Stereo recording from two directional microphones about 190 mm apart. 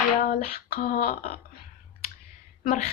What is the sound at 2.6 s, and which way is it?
Speech, 40° left (ahead or behind).